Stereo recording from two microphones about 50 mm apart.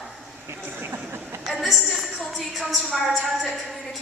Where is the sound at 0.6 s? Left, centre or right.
Right.